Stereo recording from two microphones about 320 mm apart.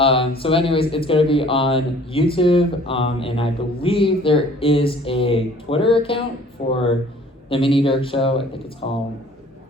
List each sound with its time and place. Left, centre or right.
0.0 s speech: centre
7.5 s speech: centre